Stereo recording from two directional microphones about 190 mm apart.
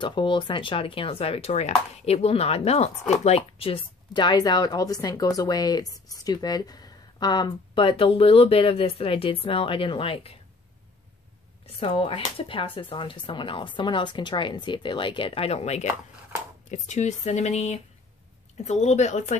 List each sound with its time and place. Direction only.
0.0 s speech: 25° left (ahead or behind)
11.6 s speech: 30° left (ahead or behind)